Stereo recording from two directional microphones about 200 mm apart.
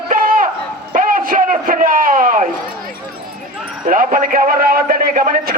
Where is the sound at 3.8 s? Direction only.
40° right (ahead or behind).